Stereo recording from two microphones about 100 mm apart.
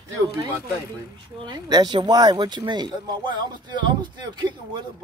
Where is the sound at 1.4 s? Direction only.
45° right (ahead or behind).